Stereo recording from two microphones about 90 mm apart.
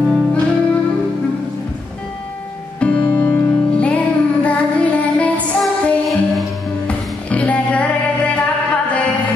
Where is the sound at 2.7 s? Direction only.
15° left (ahead or behind).